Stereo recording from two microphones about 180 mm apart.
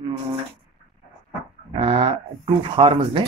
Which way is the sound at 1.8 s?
30° right (ahead or behind).